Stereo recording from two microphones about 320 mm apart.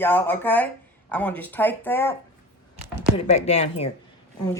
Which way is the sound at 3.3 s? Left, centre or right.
Left.